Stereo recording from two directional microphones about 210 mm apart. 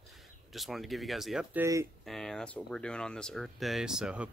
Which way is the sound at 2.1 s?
Centre (ahead or behind).